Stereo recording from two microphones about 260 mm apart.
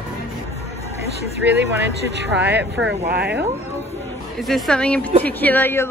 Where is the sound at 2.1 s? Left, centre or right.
Right.